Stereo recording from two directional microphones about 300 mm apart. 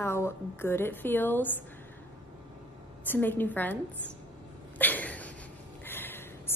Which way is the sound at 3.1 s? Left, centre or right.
Centre.